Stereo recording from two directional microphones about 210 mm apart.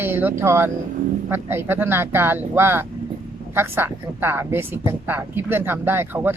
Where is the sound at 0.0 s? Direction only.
10° right (ahead or behind).